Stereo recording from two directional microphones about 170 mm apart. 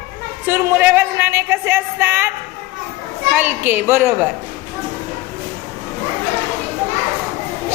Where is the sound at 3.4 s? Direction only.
10° right (ahead or behind).